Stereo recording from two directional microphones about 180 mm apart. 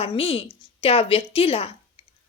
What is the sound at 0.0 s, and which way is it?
A woman's voice, 30° left (ahead or behind).